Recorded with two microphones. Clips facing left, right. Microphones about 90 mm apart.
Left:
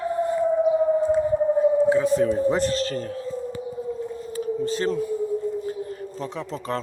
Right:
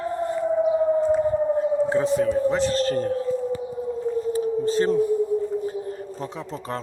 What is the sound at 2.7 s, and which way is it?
Whale vocalization, 40° right (ahead or behind).